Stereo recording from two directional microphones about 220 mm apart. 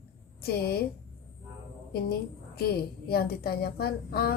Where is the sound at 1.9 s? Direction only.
45° left (ahead or behind).